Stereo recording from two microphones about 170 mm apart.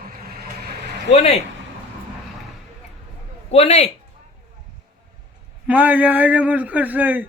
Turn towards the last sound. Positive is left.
turn(degrees=-10)  # may be behind; listen again after turning